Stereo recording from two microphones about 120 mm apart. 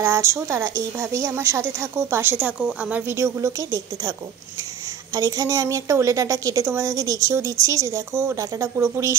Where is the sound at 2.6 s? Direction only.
5° right (ahead or behind).